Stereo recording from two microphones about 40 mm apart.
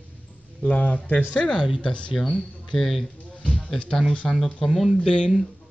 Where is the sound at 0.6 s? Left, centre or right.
Left.